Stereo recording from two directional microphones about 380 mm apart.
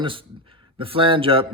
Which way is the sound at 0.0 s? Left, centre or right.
Centre.